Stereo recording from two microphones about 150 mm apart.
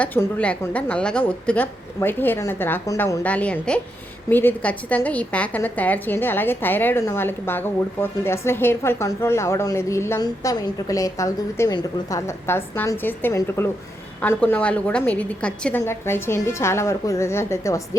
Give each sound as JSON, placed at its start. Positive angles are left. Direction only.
{"t": 0.0, "sound": "a woman's voice", "side_deg": 10}
{"t": 3.2, "sound": "a woman's voice", "side_deg": 10}